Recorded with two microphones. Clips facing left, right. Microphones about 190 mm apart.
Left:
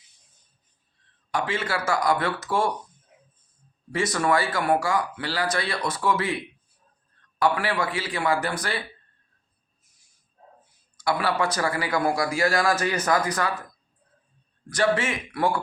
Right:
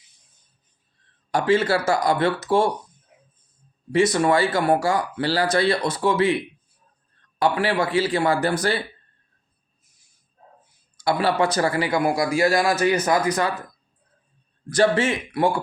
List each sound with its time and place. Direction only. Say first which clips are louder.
1.3 s a man's voice: right 8 dB; 35° right (ahead or behind)
3.9 s a man's voice: right 5 dB; 25° right (ahead or behind)
7.3 s a man's voice: right 3 dB; 25° right (ahead or behind)
11.0 s a man's voice: right 4 dB; 30° right (ahead or behind)
14.7 s a man's voice: right 4 dB; 30° right (ahead or behind)